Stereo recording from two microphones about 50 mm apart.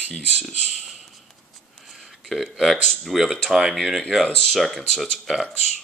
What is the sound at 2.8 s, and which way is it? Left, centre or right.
Speech, centre.